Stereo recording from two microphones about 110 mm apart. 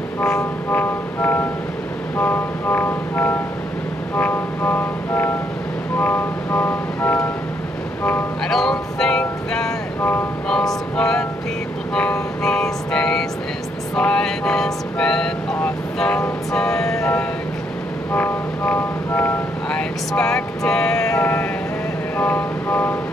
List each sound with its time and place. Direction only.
0.4 s vehicle: 15° left (ahead or behind)
5.9 s music: 15° left (ahead or behind)
8.5 s speech: 5° left (ahead or behind)
10.5 s vehicle: 5° left (ahead or behind)
11.9 s music: 10° left (ahead or behind)
13.9 s vehicle: 10° left (ahead or behind)
18.1 s music: 15° left (ahead or behind)
21.0 s vehicle: 20° left (ahead or behind)